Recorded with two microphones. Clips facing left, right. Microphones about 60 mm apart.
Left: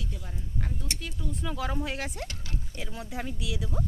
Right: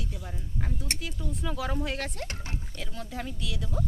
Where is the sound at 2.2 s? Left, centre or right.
Right.